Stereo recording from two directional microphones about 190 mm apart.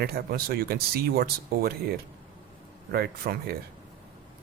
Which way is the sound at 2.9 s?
55° right (ahead or behind).